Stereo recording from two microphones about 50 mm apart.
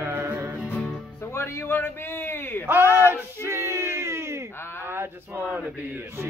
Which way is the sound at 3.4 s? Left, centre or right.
Right.